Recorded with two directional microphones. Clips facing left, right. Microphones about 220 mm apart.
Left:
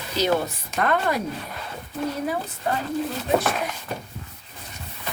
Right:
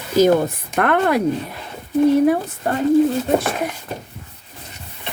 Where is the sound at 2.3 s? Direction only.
55° right (ahead or behind).